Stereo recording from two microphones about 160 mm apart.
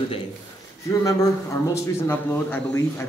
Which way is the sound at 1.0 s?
20° left (ahead or behind).